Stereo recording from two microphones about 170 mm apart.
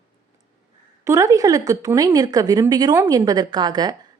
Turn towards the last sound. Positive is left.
turn(degrees=-25)  # may be behind; listen again after turning